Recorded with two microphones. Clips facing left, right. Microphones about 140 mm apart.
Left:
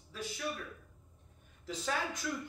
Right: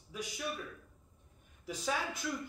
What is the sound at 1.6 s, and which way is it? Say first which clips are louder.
Speech: even; 10° right (ahead or behind).